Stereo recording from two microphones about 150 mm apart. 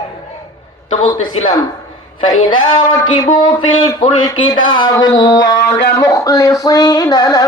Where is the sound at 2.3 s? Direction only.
30° left (ahead or behind).